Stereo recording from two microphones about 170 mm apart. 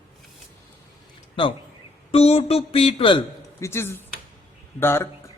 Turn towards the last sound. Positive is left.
turn(degrees=15)  # may be behind; listen again after turning